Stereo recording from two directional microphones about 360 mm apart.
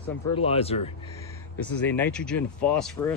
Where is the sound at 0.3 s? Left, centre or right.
Centre.